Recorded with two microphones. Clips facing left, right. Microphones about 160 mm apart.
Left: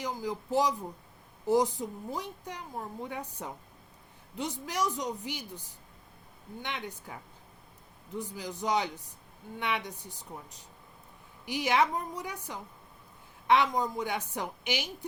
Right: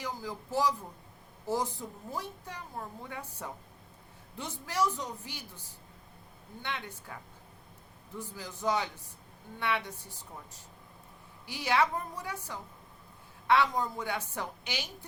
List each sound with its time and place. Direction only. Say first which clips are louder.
0.0 s a woman's voice: left 4 dB; 15° left (ahead or behind)